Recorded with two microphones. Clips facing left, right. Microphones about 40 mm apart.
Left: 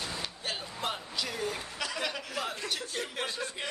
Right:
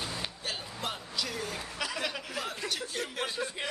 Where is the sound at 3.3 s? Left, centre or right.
Centre.